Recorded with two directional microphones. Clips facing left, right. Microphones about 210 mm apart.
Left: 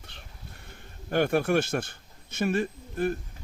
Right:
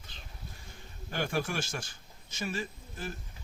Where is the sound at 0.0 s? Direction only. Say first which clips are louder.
Left 1 dB; 65° left (ahead or behind).